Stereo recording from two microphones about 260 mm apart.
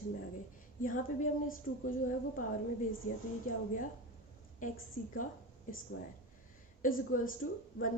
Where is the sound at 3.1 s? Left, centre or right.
Left.